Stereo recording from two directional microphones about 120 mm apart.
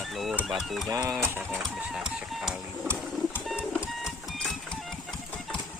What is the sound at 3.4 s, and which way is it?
Vehicle, 5° right (ahead or behind).